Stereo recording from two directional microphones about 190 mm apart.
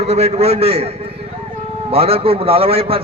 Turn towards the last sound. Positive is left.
turn(degrees=-30)  # may be behind; listen again after turning